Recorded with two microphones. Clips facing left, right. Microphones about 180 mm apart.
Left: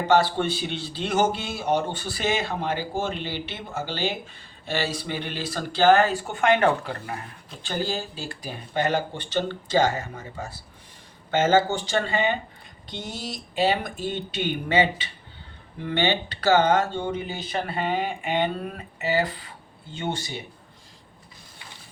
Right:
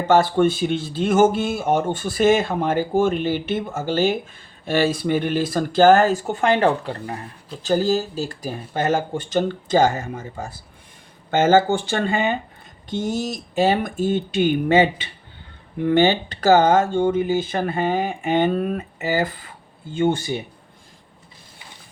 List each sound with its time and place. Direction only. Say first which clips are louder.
0.1 s speech: right 5 dB; 50° right (ahead or behind)
19.9 s speech: right 10 dB; 50° right (ahead or behind)